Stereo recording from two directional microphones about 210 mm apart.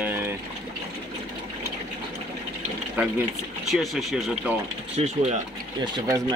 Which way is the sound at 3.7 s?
Centre (ahead or behind).